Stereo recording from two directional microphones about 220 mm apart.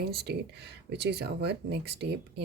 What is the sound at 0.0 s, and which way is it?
Speech, 45° right (ahead or behind).